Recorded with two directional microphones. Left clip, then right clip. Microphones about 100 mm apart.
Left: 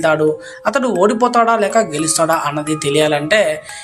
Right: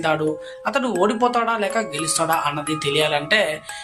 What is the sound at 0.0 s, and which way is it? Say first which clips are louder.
Speech: left 7 dB; 45° left (ahead or behind).